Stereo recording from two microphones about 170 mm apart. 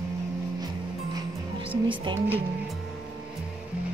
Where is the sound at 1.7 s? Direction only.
30° right (ahead or behind).